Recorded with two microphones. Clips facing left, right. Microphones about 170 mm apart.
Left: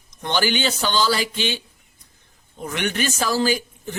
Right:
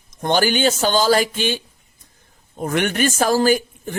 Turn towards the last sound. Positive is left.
turn(degrees=-50)  # may be behind; listen again after turning